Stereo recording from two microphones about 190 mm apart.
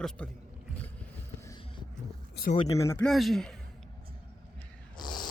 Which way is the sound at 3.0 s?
Centre (ahead or behind).